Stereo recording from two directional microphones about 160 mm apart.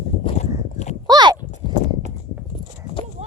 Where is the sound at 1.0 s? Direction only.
25° right (ahead or behind).